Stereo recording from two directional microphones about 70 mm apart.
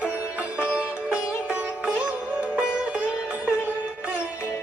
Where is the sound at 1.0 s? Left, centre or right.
Centre.